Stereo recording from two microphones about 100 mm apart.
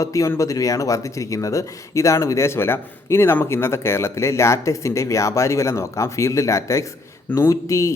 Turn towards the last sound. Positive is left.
turn(degrees=30)  # may be behind; listen again after turning